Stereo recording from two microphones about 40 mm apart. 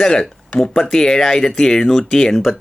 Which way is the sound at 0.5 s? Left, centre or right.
Centre.